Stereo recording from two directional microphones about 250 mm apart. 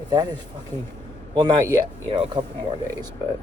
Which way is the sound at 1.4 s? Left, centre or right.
Centre.